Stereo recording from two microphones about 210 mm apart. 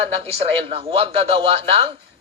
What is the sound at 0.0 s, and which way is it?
A man's voice, 30° right (ahead or behind).